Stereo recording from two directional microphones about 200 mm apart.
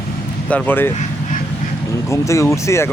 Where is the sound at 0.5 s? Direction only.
10° left (ahead or behind).